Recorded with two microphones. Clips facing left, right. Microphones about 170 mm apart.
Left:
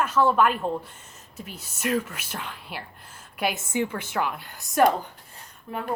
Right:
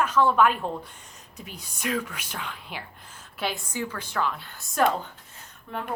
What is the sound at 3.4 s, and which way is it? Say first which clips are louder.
A woman's voice: left 4 dB; 20° left (ahead or behind).